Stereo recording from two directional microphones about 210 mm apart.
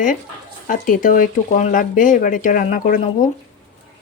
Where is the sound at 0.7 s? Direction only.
40° left (ahead or behind).